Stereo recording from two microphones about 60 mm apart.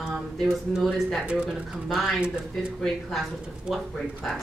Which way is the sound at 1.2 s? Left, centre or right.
Centre.